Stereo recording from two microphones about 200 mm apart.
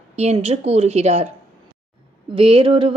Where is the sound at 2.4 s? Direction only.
25° right (ahead or behind).